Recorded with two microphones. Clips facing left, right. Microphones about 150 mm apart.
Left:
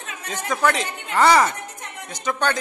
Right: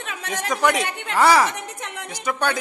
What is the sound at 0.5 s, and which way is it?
A man's voice, 15° right (ahead or behind).